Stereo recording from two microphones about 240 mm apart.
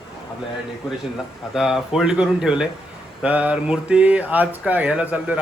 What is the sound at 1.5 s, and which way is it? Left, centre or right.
Speech, centre.